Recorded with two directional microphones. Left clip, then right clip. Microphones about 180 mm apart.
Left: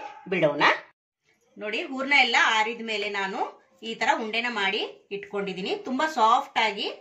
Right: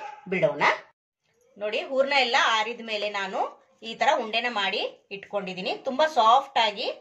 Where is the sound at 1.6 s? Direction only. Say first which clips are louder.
Right 5 dB; 55° right (ahead or behind).